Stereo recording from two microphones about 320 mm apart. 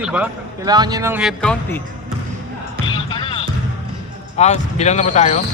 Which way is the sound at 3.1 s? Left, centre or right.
Centre.